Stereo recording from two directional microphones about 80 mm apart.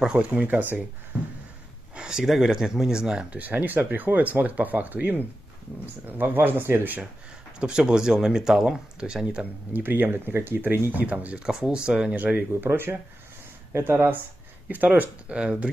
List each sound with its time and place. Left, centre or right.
0.2 s speech: centre
2.0 s speech: centre; by 7.0 s right
7.5 s speech: centre